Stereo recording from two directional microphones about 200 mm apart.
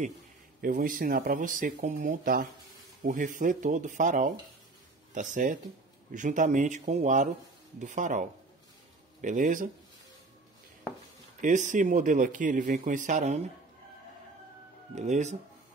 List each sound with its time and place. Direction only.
0.6 s speech: 45° right (ahead or behind)
11.4 s speech: 40° right (ahead or behind)
15.0 s speech: 35° right (ahead or behind)